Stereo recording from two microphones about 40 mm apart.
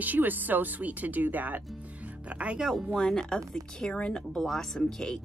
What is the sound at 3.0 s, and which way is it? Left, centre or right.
Speech, centre.